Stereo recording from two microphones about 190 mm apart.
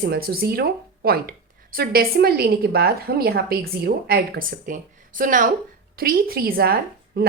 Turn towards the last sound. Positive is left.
turn(degrees=-50)  # may be behind; listen again after turning